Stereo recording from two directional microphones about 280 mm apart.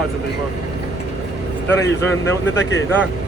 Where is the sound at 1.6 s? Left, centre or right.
Centre.